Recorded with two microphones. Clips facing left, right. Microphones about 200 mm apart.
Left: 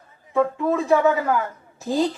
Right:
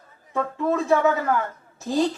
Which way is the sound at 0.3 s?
15° left (ahead or behind).